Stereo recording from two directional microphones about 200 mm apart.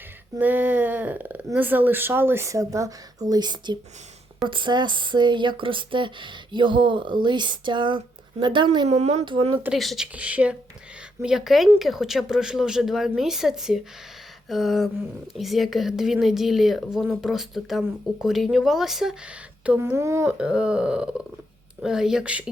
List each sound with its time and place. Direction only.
0.3 s speech: 10° right (ahead or behind); by 9.6 s 25° right (ahead or behind)
9.6 s speech: centre (ahead or behind)